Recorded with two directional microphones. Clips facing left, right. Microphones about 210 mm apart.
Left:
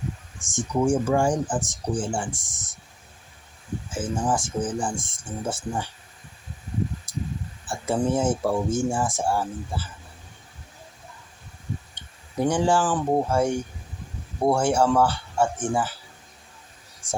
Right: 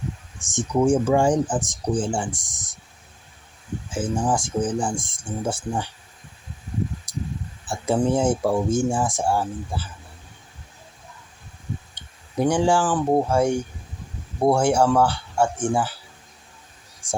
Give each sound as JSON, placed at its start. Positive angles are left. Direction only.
{"t": 0.4, "sound": "speech", "side_deg": -20}
{"t": 3.9, "sound": "speech", "side_deg": -15}
{"t": 7.1, "sound": "a sound", "side_deg": -15}
{"t": 7.7, "sound": "speech", "side_deg": -15}
{"t": 12.4, "sound": "speech", "side_deg": -10}